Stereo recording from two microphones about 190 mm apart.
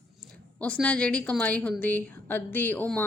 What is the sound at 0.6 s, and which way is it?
A woman's voice, 5° left (ahead or behind).